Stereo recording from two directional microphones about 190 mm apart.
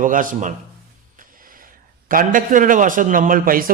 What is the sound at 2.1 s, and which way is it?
A man's voice, 45° right (ahead or behind).